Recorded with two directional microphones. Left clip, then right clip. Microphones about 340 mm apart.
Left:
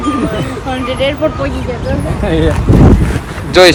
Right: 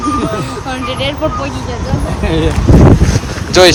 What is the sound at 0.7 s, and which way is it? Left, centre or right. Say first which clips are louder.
Speech: left 3 dB; centre.